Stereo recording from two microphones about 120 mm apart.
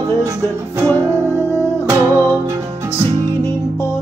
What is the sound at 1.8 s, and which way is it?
Music, 25° right (ahead or behind).